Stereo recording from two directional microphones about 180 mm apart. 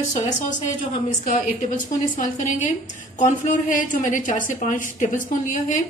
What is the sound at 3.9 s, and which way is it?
A woman's voice, 45° left (ahead or behind).